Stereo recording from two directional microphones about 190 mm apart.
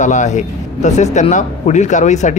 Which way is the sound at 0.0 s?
40° left (ahead or behind).